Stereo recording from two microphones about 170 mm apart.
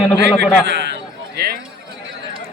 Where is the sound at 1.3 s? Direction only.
65° right (ahead or behind).